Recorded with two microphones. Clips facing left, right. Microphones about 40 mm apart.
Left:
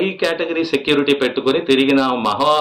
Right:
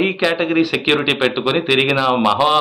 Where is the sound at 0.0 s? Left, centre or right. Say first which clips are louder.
Right 1 dB; right.